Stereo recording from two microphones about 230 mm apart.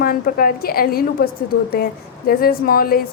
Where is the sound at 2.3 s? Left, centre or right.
Left.